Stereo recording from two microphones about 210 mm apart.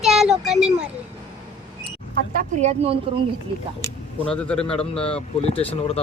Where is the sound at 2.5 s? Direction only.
30° right (ahead or behind).